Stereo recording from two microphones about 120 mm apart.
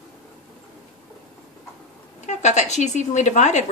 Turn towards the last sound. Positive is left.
turn(degrees=80)